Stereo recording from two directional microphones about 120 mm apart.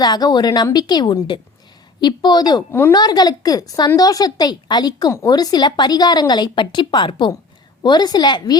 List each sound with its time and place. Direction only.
0.0 s a woman's voice: 35° left (ahead or behind)